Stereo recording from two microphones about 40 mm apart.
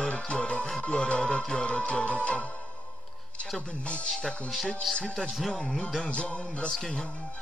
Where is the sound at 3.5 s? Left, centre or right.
Left.